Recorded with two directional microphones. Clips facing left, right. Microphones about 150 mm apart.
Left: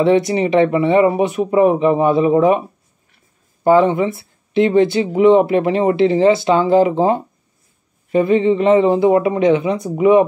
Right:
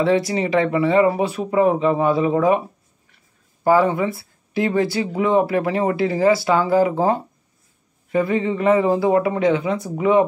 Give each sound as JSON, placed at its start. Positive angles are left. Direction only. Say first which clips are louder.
{"t": 0.0, "sound": "speech", "louder": "left 4 dB", "side_deg": 20}
{"t": 3.6, "sound": "speech", "louder": "left 4 dB", "side_deg": 25}